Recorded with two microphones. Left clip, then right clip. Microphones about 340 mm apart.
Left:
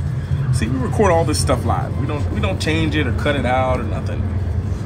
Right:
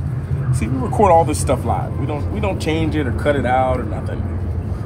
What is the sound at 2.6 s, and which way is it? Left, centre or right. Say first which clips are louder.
Speech: left 2 dB; right.